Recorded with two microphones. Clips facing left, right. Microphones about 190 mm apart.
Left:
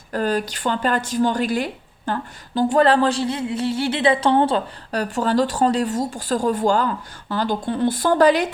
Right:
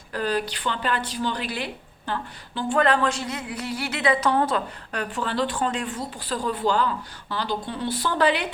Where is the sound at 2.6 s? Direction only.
35° left (ahead or behind).